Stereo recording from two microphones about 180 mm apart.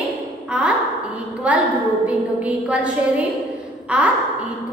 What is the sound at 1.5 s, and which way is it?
A woman's voice, 5° right (ahead or behind).